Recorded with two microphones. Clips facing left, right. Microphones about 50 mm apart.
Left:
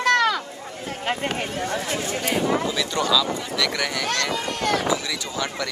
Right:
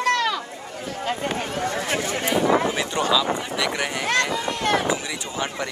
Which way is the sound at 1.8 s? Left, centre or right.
Right.